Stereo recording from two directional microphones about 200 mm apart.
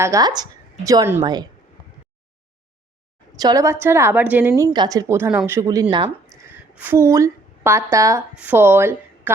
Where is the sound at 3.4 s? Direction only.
20° right (ahead or behind).